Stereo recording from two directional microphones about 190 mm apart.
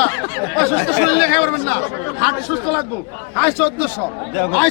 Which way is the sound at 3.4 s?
10° left (ahead or behind).